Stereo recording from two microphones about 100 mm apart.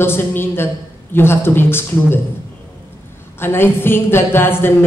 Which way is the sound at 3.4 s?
25° left (ahead or behind).